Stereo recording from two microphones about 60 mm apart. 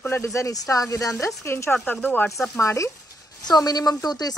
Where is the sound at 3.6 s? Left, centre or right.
Left.